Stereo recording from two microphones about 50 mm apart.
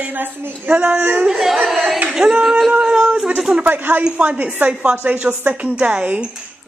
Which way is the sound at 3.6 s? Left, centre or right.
Right.